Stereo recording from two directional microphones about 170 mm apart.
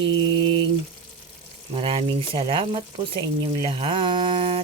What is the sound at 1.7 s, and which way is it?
Speech, 35° right (ahead or behind).